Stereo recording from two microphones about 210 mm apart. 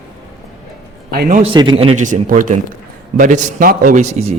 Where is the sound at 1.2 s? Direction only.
40° right (ahead or behind).